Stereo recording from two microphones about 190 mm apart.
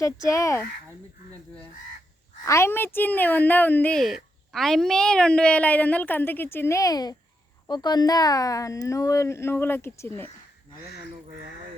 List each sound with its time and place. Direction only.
0.0 s speech: 15° left (ahead or behind)
2.4 s speech: 15° left (ahead or behind)